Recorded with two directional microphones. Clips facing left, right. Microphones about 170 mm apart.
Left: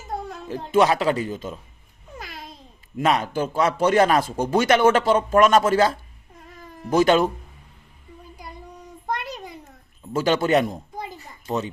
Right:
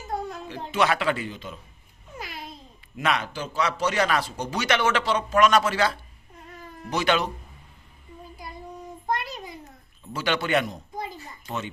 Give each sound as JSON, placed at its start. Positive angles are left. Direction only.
{"t": 0.4, "sound": "speech", "side_deg": 45}
{"t": 3.0, "sound": "a man's voice", "side_deg": 40}
{"t": 10.1, "sound": "a man's voice", "side_deg": 45}